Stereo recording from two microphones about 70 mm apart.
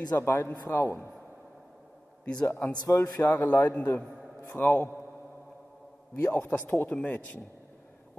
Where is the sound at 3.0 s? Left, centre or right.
Left.